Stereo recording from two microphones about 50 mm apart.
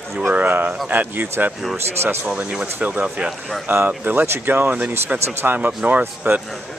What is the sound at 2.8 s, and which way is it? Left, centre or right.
Speech, right.